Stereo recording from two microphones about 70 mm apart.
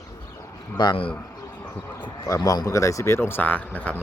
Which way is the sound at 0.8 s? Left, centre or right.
Left.